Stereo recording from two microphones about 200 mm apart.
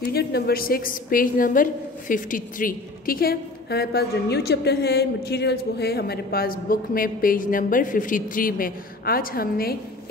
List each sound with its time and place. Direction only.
0.1 s a woman's voice: 50° left (ahead or behind)